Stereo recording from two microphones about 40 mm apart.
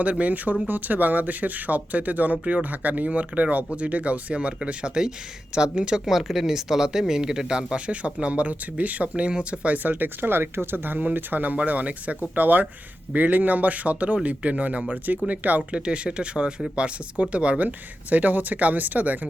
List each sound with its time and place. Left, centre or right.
0.0 s speech: right
6.1 s speech: centre; by 9.7 s right
9.7 s speech: right
10.8 s speech: right
15.7 s speech: right
17.6 s speech: right